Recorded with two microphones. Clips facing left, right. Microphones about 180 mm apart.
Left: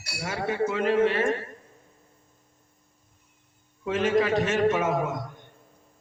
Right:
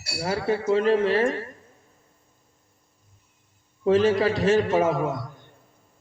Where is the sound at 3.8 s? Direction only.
35° right (ahead or behind).